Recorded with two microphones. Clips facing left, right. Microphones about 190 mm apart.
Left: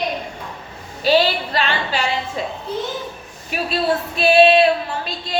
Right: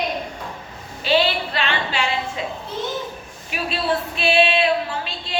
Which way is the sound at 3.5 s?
40° left (ahead or behind).